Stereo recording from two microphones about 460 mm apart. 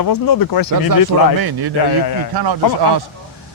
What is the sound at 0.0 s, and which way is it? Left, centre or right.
Speech, left.